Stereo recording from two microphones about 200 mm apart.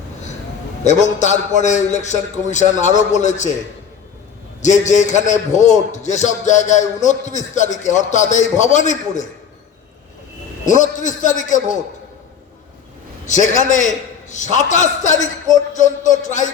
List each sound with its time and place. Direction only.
0.9 s a man's voice: 35° left (ahead or behind)
4.6 s a man's voice: 35° left (ahead or behind)
10.7 s a man's voice: 40° left (ahead or behind)
13.2 s a man's voice: 40° left (ahead or behind)